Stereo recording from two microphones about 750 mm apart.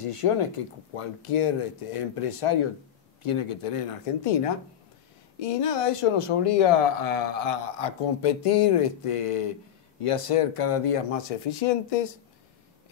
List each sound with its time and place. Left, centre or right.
0.0 s speech: left